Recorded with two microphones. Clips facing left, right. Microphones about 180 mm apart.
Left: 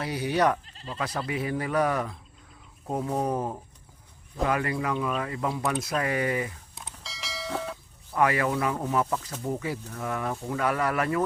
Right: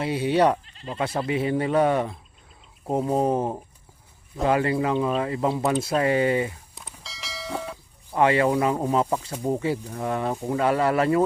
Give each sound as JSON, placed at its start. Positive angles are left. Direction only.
{"t": 0.0, "sound": "speech", "side_deg": -25}
{"t": 0.6, "sound": "speech", "side_deg": 35}
{"t": 0.9, "sound": "speech", "side_deg": -30}
{"t": 7.0, "sound": "a sound", "side_deg": 0}
{"t": 8.1, "sound": "speech", "side_deg": -25}